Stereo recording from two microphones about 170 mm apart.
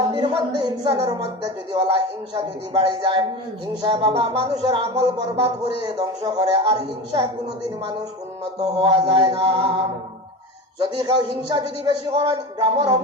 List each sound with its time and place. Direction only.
0.1 s a man's voice: 25° right (ahead or behind)
3.8 s music: 35° right (ahead or behind)
8.5 s music: 30° right (ahead or behind)